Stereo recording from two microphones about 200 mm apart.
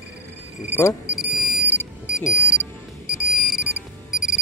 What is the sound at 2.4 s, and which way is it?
Music, 5° right (ahead or behind).